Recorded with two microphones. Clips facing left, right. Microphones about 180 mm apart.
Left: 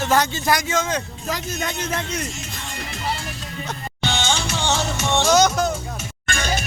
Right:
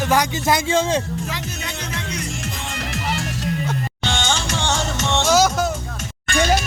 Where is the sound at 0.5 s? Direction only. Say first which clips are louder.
Right 4 dB; 30° right (ahead or behind).